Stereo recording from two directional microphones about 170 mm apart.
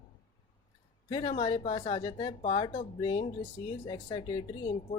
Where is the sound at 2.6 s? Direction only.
30° left (ahead or behind).